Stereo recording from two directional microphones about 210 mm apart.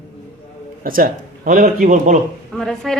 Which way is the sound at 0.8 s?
40° right (ahead or behind).